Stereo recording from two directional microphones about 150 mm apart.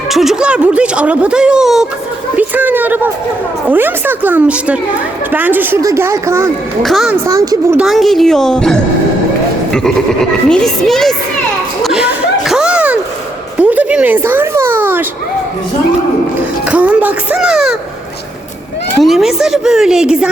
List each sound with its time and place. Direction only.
0.1 s a woman's voice: centre (ahead or behind); by 6.5 s 20° right (ahead or behind)
6.8 s speech: centre (ahead or behind)
7.3 s speech: 20° right (ahead or behind)
7.8 s speech: centre (ahead or behind)
10.5 s speech: centre (ahead or behind)
11.8 s a sound: 5° right (ahead or behind)
16.7 s a sound: 10° right (ahead or behind)
19.0 s speech: centre (ahead or behind)